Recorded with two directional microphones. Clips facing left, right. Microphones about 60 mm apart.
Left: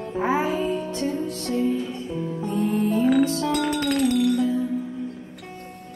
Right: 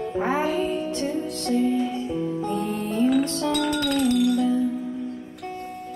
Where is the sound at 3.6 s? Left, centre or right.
Left.